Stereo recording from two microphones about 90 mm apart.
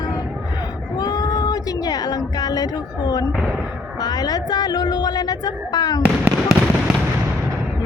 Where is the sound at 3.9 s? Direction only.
50° left (ahead or behind).